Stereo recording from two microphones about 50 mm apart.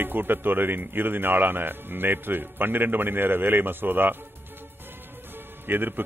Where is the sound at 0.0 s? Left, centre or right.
Right.